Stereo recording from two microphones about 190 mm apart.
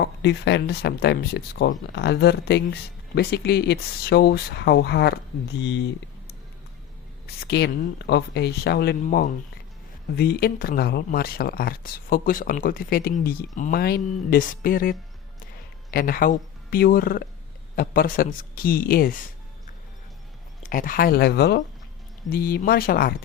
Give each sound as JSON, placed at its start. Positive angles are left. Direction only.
{"t": 0.0, "sound": "speech", "side_deg": 65}
{"t": 7.4, "sound": "speech", "side_deg": 60}
{"t": 9.0, "sound": "speech", "side_deg": 40}
{"t": 10.2, "sound": "speech", "side_deg": 55}
{"t": 20.6, "sound": "speech", "side_deg": 45}